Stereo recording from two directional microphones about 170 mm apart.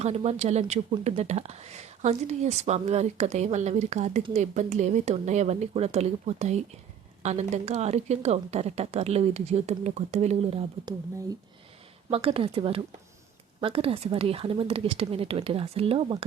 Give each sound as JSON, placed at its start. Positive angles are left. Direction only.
{"t": 0.0, "sound": "speech", "side_deg": -40}
{"t": 12.1, "sound": "speech", "side_deg": -35}